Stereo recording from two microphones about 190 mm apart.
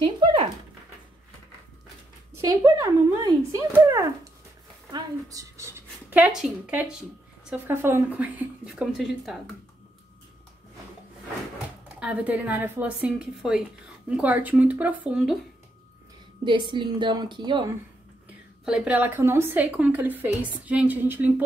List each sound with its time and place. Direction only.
0.0 s a sound: 30° right (ahead or behind)
2.4 s a woman's voice: 20° right (ahead or behind); by 9.6 s centre (ahead or behind)
11.9 s a woman's voice: 5° right (ahead or behind)
16.4 s a woman's voice: 25° right (ahead or behind)
18.7 s a woman's voice: 10° right (ahead or behind)